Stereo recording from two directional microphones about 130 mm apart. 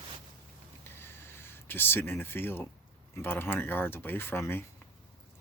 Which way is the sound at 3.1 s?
15° left (ahead or behind).